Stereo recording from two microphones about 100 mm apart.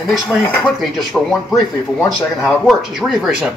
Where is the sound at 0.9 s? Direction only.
Centre (ahead or behind).